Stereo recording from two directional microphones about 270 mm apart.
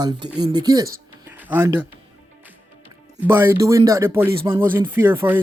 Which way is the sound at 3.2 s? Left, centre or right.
Centre.